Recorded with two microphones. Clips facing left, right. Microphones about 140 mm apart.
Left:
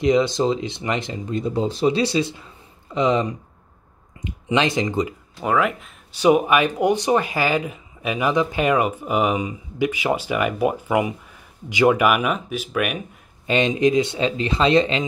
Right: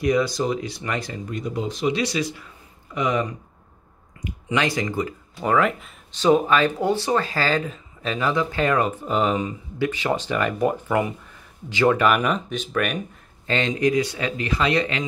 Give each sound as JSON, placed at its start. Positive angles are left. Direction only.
{"t": 0.0, "sound": "speech", "side_deg": 25}
{"t": 5.4, "sound": "speech", "side_deg": 5}
{"t": 6.1, "sound": "speech", "side_deg": 15}
{"t": 13.5, "sound": "speech", "side_deg": 20}